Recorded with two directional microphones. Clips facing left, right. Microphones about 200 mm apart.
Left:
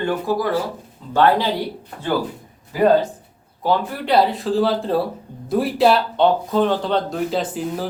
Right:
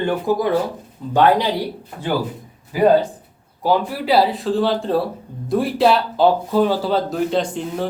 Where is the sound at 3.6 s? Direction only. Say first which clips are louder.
Right 2 dB; 10° right (ahead or behind).